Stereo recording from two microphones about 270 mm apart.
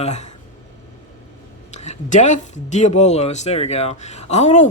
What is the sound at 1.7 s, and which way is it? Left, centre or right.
Speech, left.